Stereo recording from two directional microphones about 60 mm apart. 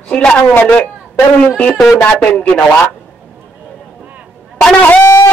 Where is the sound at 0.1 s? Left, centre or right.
Centre.